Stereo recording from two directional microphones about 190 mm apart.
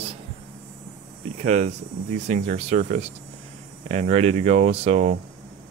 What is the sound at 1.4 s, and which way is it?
Speech, 35° right (ahead or behind).